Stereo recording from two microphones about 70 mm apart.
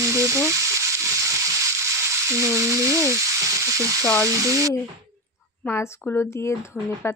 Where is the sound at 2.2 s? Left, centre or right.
Right.